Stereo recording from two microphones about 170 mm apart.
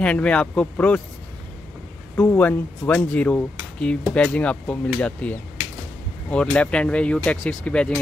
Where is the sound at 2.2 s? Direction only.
10° left (ahead or behind).